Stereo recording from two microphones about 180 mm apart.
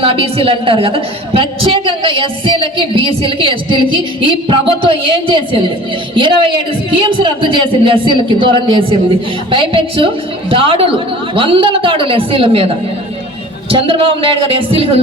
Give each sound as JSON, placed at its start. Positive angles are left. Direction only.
{"t": 0.0, "sound": "a woman's voice", "side_deg": -30}